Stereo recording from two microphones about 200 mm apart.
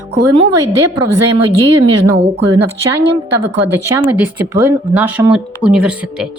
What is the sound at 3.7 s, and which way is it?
Speech, 10° right (ahead or behind).